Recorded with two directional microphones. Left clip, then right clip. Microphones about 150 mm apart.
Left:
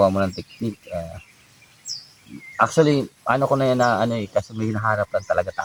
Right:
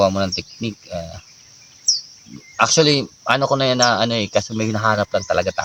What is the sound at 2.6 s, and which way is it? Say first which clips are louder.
Speech: right 3 dB; 25° right (ahead or behind).